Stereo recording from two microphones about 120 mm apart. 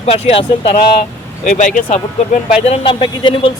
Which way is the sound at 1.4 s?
90° left.